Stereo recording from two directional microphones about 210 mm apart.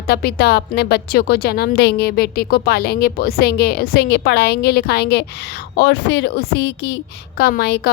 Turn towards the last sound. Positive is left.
turn(degrees=50)  # may be behind; listen again after turning